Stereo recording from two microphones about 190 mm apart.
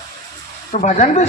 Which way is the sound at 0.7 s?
40° left (ahead or behind).